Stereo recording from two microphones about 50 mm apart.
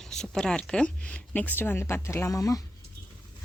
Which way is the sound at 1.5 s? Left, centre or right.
Left.